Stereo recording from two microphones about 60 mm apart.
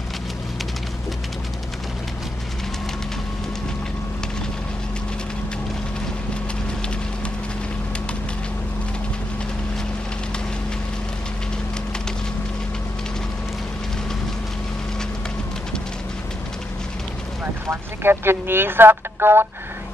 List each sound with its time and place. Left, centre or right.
17.6 s speech: right